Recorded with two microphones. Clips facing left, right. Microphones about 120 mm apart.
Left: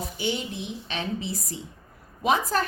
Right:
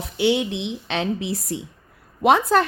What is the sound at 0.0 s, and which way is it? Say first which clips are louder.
A woman's voice: right 9 dB; 80° right.